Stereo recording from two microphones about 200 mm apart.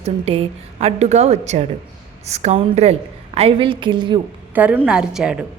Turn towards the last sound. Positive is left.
turn(degrees=-5)  # may be behind; listen again after turning